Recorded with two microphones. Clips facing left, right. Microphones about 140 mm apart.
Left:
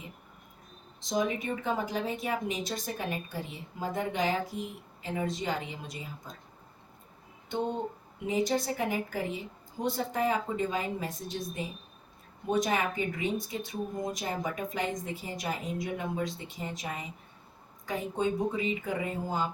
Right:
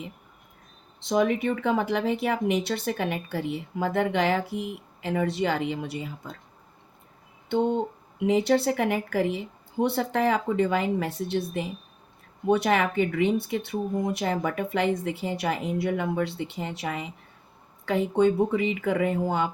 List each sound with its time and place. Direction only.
0.9 s speech: 65° right (ahead or behind)
8.3 s speech: 65° right (ahead or behind)